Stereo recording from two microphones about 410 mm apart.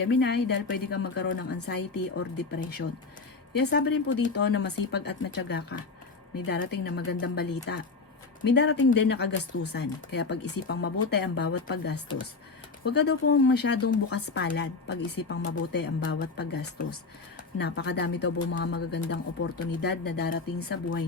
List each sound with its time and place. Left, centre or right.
0.0 s a woman's voice: left